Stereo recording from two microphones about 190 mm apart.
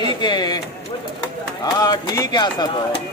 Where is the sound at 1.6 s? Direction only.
20° left (ahead or behind).